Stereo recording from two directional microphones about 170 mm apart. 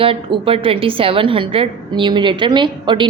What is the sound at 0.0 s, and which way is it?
A woman's voice, 30° right (ahead or behind).